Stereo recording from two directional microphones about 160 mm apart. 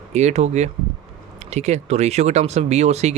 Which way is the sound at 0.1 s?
45° right (ahead or behind).